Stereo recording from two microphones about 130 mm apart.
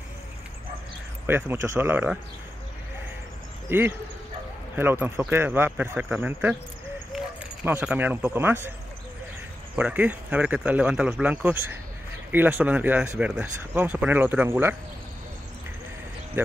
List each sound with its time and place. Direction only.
1.2 s speech: 15° right (ahead or behind)
3.6 s speech: 15° right (ahead or behind)
7.1 s a sound: centre (ahead or behind)
7.8 s speech: 15° right (ahead or behind)
9.8 s speech: 10° right (ahead or behind)